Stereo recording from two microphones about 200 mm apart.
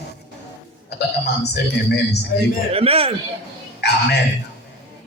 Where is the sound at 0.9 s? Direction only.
55° left (ahead or behind).